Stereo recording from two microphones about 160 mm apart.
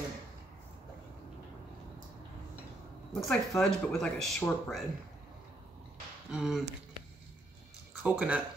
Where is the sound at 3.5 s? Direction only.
20° left (ahead or behind).